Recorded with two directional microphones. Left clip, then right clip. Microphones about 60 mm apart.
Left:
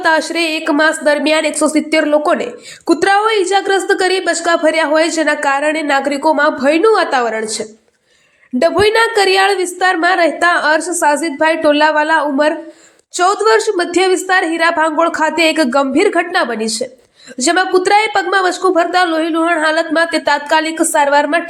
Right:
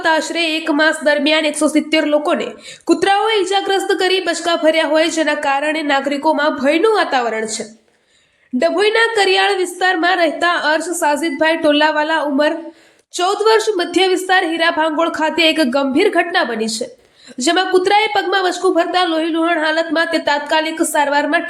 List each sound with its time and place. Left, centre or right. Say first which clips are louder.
0.0 s a woman's voice: left 2 dB; centre
5.3 s a woman's voice: left 3 dB; left
8.5 s a woman's voice: left 3 dB; left